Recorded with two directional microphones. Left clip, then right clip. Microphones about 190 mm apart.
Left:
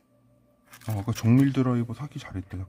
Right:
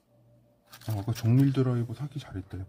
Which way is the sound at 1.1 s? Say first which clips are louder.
Left 4 dB; 30° left (ahead or behind).